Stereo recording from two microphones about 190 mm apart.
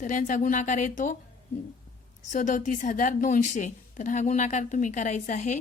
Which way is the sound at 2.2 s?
40° left (ahead or behind).